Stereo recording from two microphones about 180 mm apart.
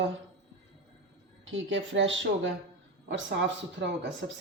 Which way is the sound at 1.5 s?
90° right.